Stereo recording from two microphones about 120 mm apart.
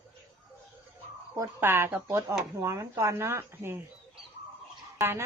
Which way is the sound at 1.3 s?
20° right (ahead or behind).